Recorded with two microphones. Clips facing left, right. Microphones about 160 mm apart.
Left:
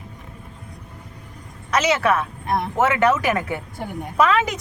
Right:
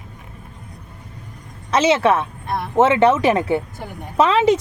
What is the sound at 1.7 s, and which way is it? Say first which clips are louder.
A woman's voice: right 4 dB; 25° right (ahead or behind).